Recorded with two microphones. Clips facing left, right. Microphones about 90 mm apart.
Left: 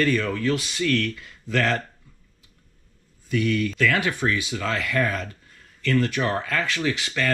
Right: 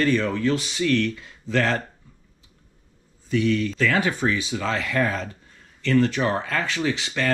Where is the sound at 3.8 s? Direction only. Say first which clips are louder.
Right 1 dB; 20° right (ahead or behind).